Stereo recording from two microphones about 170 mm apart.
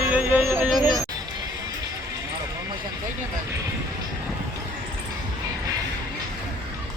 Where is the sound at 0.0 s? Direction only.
10° right (ahead or behind).